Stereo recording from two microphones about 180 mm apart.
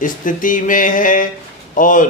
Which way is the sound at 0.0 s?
45° left (ahead or behind).